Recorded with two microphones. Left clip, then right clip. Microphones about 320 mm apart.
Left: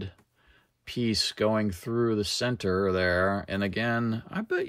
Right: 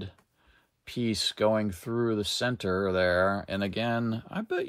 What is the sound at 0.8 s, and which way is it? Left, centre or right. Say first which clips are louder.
Speech: left 2 dB; centre.